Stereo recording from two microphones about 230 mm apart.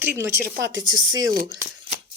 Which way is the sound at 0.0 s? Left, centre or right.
Centre.